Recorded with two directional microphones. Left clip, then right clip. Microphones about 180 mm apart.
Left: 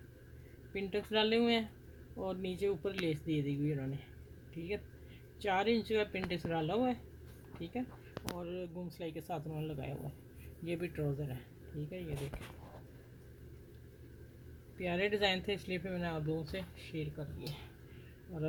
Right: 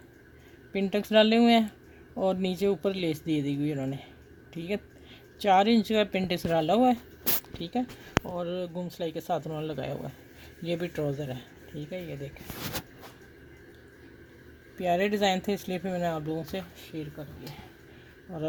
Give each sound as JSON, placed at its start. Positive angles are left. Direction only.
{"t": 0.7, "sound": "speech", "side_deg": -55}
{"t": 8.4, "sound": "speech", "side_deg": -50}
{"t": 14.8, "sound": "speech", "side_deg": -55}